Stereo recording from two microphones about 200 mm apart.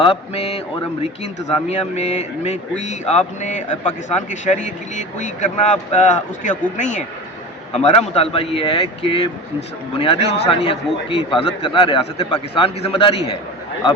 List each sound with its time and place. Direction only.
0.0 s a man's voice: 30° left (ahead or behind)
1.7 s a man's voice: 35° left (ahead or behind)
10.2 s a man's voice: 60° left (ahead or behind)
10.5 s a man's voice: 30° left (ahead or behind)